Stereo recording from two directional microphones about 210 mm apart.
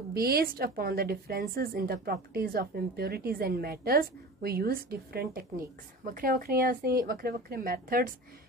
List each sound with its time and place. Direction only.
0.1 s a woman's voice: 45° right (ahead or behind)